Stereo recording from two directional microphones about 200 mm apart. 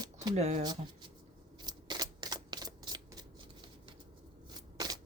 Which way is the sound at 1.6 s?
20° right (ahead or behind).